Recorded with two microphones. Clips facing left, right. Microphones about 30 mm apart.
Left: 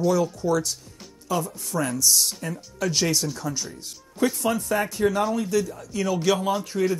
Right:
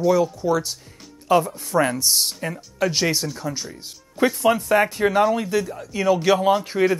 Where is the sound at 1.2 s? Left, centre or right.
Right.